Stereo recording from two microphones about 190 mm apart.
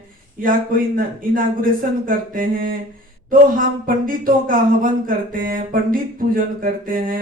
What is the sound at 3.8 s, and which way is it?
Speech, 45° right (ahead or behind).